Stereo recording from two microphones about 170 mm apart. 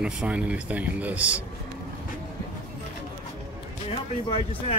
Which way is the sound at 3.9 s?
35° left (ahead or behind).